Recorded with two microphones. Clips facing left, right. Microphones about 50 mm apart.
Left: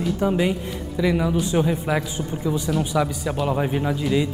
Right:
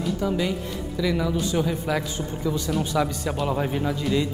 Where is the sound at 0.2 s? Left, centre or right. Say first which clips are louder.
Left 6 dB; left.